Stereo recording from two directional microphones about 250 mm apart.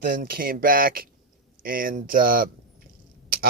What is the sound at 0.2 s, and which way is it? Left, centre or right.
Speech, right.